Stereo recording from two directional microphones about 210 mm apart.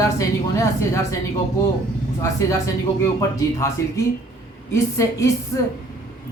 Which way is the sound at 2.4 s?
15° left (ahead or behind).